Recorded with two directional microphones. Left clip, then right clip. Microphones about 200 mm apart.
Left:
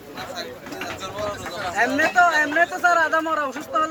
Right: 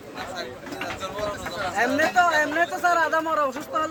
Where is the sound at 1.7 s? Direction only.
55° right (ahead or behind).